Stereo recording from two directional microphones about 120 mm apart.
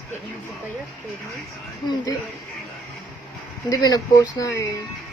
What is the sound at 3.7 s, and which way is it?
Speech, 30° left (ahead or behind).